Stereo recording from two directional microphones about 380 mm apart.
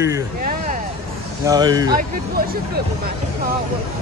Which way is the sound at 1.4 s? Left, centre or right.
Centre.